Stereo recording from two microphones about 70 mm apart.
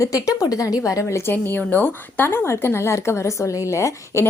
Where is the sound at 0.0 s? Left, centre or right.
Left.